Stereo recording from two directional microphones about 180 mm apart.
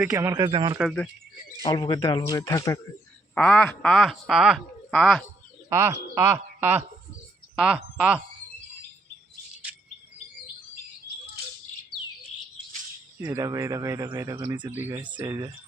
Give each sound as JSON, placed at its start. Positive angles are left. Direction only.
{"t": 0.0, "sound": "speech", "side_deg": -15}
{"t": 0.8, "sound": "speech", "side_deg": 0}
{"t": 1.6, "sound": "speech", "side_deg": 25}
{"t": 3.3, "sound": "speech", "side_deg": 5}
{"t": 5.6, "sound": "speech", "side_deg": -15}
{"t": 13.2, "sound": "speech", "side_deg": -20}
{"t": 14.8, "sound": "speech", "side_deg": -15}